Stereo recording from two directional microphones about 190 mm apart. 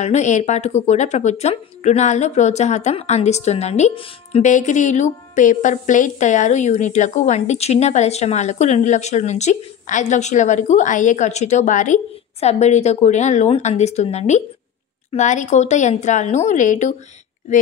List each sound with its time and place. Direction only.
0.0 s a woman's voice: 40° left (ahead or behind)